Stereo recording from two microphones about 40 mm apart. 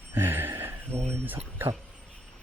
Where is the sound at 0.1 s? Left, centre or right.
Right.